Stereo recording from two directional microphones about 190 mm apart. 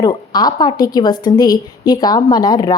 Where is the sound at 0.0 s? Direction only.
20° left (ahead or behind).